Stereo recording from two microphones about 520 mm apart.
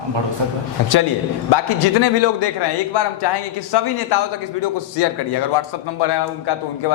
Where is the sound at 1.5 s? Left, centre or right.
Left.